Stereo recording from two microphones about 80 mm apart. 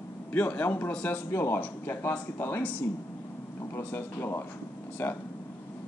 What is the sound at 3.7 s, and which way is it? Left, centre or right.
Speech, left.